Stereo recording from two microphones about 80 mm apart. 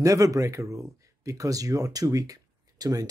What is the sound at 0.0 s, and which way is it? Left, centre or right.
Speech, right.